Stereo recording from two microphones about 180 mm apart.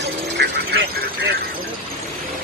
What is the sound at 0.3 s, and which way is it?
Vehicle, 65° right (ahead or behind).